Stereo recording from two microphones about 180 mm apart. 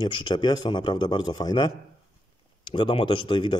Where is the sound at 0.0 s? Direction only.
25° left (ahead or behind).